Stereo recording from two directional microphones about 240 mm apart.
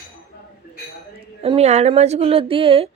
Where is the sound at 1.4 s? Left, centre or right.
Right.